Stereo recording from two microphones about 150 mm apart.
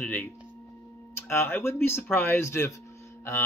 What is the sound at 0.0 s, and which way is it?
Music, 10° left (ahead or behind).